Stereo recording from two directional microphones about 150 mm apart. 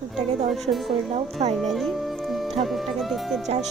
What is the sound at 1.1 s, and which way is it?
Speech, 50° right (ahead or behind).